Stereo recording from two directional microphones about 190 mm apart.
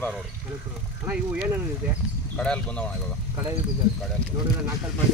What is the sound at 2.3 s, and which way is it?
Speech, 5° left (ahead or behind).